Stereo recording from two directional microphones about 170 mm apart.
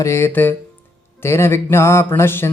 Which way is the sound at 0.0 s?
15° left (ahead or behind).